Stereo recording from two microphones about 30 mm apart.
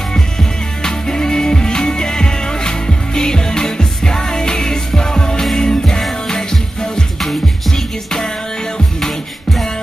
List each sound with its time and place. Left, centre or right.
0.1 s music: left
7.2 s music: centre